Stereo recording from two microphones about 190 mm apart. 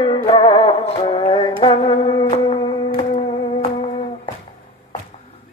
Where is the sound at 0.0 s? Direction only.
25° left (ahead or behind).